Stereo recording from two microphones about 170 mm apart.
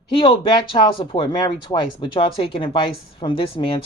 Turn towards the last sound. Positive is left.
turn(degrees=30)  # may be behind; listen again after turning